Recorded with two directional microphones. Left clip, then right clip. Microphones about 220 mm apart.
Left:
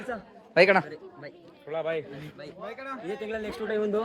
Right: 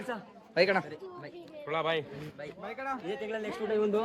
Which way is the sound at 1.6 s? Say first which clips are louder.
Even; 55° right (ahead or behind).